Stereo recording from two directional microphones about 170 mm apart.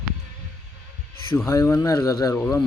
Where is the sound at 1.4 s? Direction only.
15° left (ahead or behind).